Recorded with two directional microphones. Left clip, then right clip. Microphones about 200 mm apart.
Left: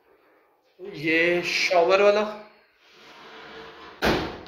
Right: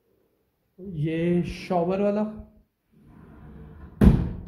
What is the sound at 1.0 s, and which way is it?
Speech, 20° right (ahead or behind).